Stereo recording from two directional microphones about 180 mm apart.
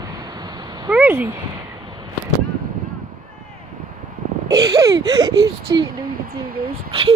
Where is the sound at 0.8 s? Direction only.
10° right (ahead or behind).